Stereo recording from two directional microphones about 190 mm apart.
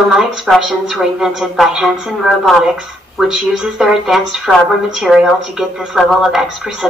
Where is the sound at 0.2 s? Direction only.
Centre (ahead or behind).